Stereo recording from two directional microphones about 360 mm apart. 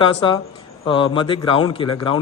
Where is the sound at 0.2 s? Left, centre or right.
Centre.